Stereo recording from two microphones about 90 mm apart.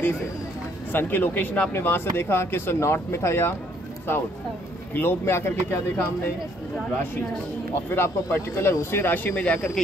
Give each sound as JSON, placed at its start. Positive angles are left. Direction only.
{"t": 0.9, "sound": "speech", "side_deg": 20}
{"t": 7.9, "sound": "speech", "side_deg": 25}